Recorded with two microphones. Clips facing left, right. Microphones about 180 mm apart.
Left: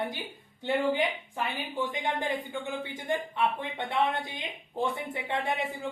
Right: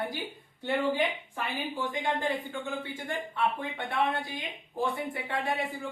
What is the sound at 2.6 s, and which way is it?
Speech, 20° left (ahead or behind).